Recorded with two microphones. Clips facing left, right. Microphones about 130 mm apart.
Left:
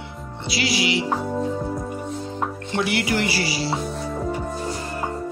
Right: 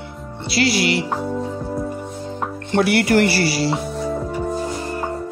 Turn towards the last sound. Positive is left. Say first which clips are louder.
# right 7 dB
turn(degrees=-65)  # may be behind; listen again after turning